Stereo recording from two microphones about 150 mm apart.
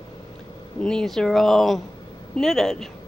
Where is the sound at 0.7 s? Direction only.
5° left (ahead or behind).